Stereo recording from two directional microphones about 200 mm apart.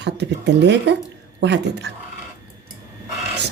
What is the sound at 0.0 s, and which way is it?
Speech, 60° right (ahead or behind).